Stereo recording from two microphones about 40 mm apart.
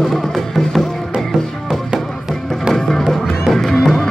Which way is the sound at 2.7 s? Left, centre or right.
Centre.